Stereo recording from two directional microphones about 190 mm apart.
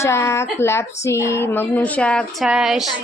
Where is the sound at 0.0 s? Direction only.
15° left (ahead or behind).